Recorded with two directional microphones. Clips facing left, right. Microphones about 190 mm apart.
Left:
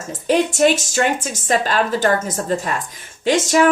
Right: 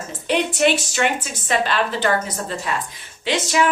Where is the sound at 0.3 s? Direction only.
40° left (ahead or behind).